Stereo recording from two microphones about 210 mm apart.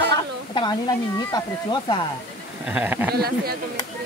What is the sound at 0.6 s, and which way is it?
Speech, 20° left (ahead or behind).